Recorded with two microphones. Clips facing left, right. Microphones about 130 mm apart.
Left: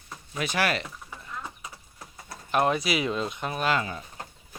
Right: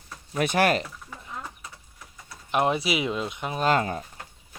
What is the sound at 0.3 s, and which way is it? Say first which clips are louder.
Speech: right 5 dB; 50° right (ahead or behind).